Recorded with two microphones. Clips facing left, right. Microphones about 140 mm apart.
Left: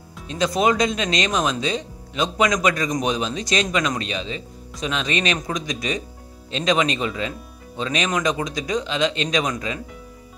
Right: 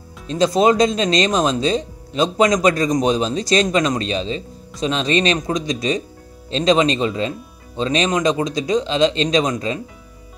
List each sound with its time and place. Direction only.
0.3 s speech: 30° right (ahead or behind)